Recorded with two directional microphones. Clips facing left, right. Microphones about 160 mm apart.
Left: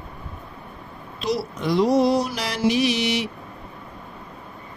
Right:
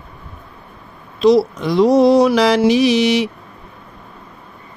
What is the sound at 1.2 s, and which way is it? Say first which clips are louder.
Speech: right 12 dB; 90° right.